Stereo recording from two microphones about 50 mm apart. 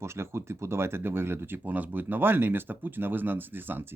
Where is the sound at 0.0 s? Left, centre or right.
Right.